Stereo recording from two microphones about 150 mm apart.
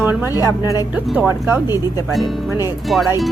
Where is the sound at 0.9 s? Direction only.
10° right (ahead or behind).